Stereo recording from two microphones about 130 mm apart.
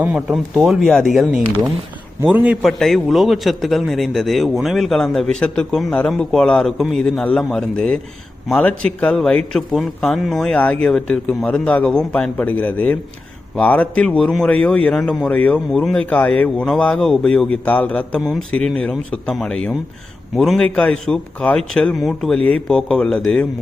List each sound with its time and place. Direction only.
0.0 s a man's voice: 10° right (ahead or behind)
2.2 s a man's voice: 10° right (ahead or behind); by 23.5 s 5° left (ahead or behind)